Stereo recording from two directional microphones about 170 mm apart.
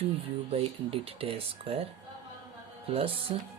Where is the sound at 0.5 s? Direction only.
35° right (ahead or behind).